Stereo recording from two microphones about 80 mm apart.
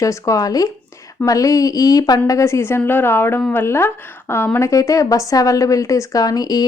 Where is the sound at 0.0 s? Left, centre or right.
Left.